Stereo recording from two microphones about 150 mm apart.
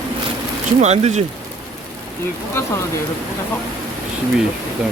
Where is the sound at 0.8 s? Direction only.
50° right (ahead or behind).